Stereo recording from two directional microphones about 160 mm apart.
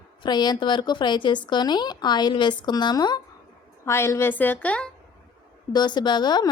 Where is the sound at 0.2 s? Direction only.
25° left (ahead or behind); by 4.9 s 10° left (ahead or behind).